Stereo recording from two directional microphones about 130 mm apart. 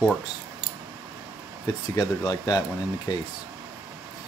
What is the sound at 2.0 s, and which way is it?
Speech, 30° left (ahead or behind).